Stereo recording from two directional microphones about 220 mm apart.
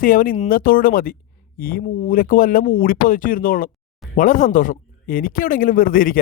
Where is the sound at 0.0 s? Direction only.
40° left (ahead or behind).